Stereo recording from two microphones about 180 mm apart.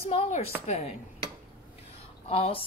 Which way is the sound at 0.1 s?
35° left (ahead or behind).